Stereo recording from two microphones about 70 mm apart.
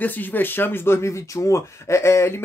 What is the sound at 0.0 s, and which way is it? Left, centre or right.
Speech, left.